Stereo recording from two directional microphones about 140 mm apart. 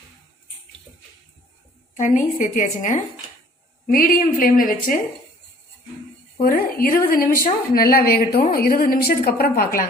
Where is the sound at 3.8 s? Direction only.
90° left.